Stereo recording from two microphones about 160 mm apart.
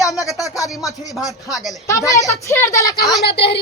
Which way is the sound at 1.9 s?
20° left (ahead or behind).